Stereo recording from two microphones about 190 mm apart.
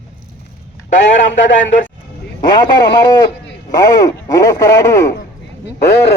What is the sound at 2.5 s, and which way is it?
Speech, 20° left (ahead or behind).